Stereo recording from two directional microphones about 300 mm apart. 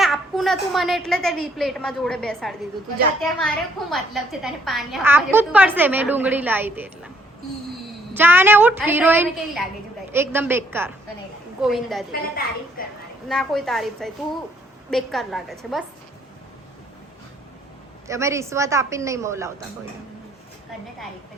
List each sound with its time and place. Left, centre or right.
0.0 s a woman's voice: centre
8.1 s a woman's voice: centre
12.8 s a woman's voice: left
13.2 s a woman's voice: centre
18.1 s a woman's voice: centre